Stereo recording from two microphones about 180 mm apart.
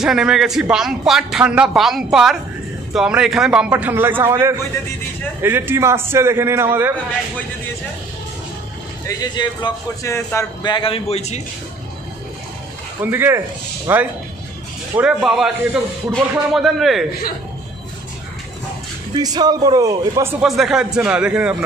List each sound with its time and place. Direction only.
0.0 s a man's voice: 5° right (ahead or behind)
9.0 s a man's voice: 25° left (ahead or behind)
13.0 s a man's voice: 10° right (ahead or behind)
19.1 s a man's voice: 20° right (ahead or behind)
20.4 s speech: centre (ahead or behind)